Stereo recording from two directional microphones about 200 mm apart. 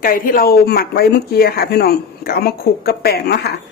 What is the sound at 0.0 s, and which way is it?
Speech, 45° left (ahead or behind).